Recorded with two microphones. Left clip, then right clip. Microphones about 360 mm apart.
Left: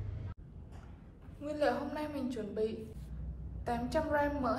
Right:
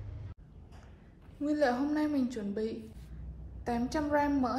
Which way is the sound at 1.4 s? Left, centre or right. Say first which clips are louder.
Right 4 dB; centre.